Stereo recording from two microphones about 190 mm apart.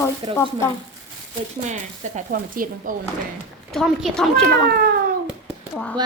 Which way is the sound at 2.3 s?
45° right (ahead or behind).